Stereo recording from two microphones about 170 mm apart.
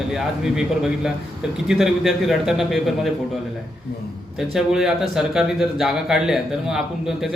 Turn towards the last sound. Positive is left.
turn(degrees=0)  # may be behind; listen again after turning